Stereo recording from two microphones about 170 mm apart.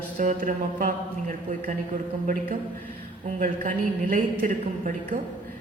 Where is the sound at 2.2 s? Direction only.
50° right (ahead or behind).